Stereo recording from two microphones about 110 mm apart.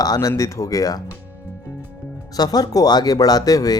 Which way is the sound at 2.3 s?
35° left (ahead or behind).